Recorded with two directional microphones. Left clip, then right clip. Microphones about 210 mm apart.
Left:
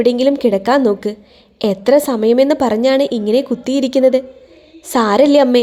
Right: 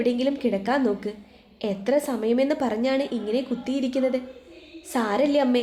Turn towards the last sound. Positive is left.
turn(degrees=40)  # may be behind; listen again after turning